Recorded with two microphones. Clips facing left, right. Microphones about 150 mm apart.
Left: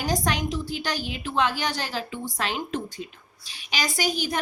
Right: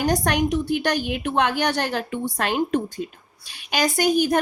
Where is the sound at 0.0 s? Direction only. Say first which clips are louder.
Right 5 dB; 60° right (ahead or behind).